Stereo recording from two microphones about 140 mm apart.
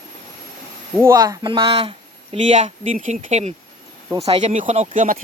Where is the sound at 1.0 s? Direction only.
25° right (ahead or behind).